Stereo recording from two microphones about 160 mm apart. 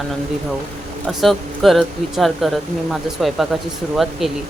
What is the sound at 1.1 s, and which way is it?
Speech, centre (ahead or behind).